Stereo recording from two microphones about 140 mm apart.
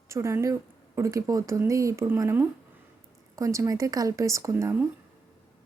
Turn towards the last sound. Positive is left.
turn(degrees=-15)  # may be behind; listen again after turning